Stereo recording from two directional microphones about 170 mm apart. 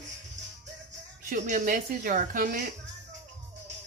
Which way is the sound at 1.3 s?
50° right (ahead or behind).